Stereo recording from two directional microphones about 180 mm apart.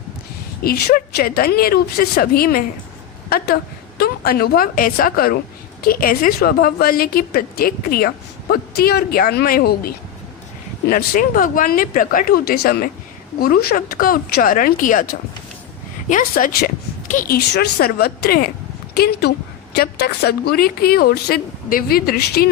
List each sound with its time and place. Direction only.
0.6 s a woman's voice: 55° left (ahead or behind)